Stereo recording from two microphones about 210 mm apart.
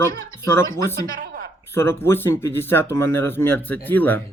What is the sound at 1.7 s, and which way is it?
Speech, 10° left (ahead or behind).